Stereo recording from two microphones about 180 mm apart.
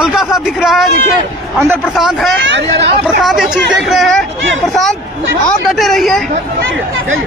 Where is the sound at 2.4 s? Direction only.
80° right.